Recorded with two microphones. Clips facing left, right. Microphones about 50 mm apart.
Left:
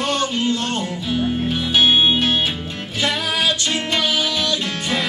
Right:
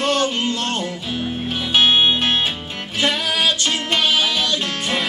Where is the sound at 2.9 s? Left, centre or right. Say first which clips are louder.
Right 1 dB; centre.